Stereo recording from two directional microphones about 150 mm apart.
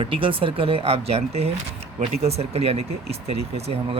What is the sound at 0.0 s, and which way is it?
Speech, 35° right (ahead or behind).